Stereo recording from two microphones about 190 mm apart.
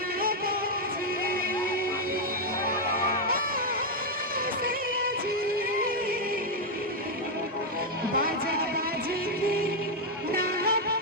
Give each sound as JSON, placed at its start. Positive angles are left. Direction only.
{"t": 0.2, "sound": "music", "side_deg": -50}
{"t": 2.6, "sound": "music", "side_deg": -50}
{"t": 10.3, "sound": "music", "side_deg": -50}